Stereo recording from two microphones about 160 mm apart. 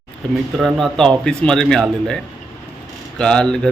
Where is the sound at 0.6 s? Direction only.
Centre (ahead or behind).